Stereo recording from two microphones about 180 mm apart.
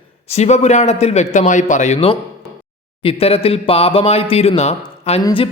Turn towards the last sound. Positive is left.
turn(degrees=25)  # may be behind; listen again after turning